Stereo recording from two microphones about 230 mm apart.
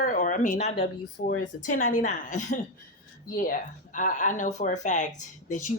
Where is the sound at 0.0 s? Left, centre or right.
Left.